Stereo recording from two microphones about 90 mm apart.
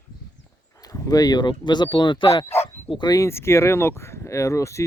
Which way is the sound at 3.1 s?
35° left (ahead or behind).